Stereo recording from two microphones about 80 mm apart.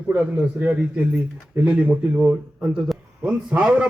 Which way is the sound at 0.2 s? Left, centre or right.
Right.